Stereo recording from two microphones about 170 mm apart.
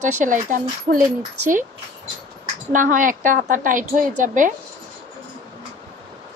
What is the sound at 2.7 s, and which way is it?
A woman's voice, 50° right (ahead or behind).